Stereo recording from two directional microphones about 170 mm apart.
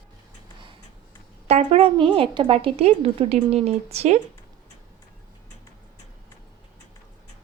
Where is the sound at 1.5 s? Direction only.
35° right (ahead or behind).